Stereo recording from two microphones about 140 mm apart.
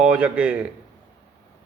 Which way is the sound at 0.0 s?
5° right (ahead or behind).